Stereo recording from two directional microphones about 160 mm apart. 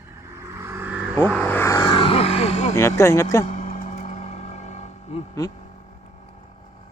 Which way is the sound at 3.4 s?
45° left (ahead or behind).